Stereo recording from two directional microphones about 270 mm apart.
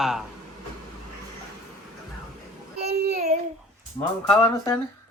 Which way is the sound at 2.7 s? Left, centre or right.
Right.